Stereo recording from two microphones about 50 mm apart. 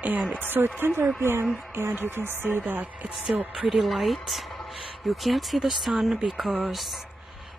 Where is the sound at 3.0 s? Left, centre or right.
Centre.